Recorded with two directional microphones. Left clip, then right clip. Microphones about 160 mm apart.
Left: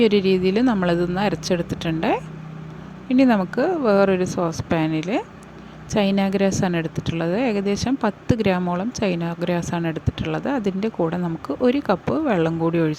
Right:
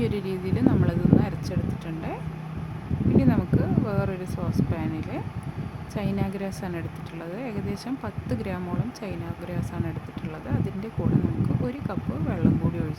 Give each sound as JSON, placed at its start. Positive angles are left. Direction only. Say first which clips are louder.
{"t": 0.0, "sound": "a woman's voice", "louder": "left 12 dB", "side_deg": 45}
{"t": 3.2, "sound": "a woman's voice", "louder": "left 8 dB", "side_deg": 50}